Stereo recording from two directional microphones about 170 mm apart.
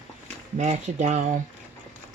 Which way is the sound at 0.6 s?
45° right (ahead or behind).